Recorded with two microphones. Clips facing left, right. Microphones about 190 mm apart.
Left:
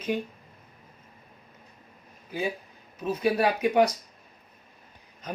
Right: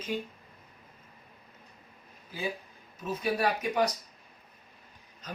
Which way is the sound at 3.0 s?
65° left (ahead or behind).